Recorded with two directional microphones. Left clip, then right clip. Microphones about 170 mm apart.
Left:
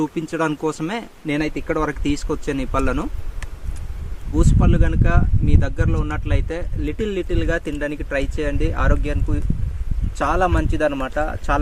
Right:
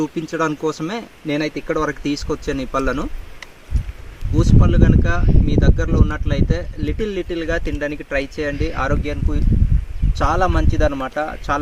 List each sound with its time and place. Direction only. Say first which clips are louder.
0.0 s speech: right 1 dB; 15° left (ahead or behind)
4.4 s speech: right 3 dB; 10° left (ahead or behind)